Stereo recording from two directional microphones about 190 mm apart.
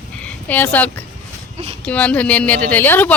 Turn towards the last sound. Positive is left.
turn(degrees=10)  # may be behind; listen again after turning